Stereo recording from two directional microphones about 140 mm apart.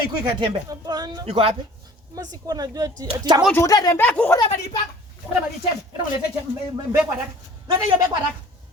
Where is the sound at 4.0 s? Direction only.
10° left (ahead or behind).